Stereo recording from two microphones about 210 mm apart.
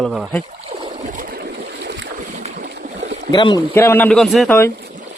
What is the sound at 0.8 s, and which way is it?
Boat, 35° right (ahead or behind).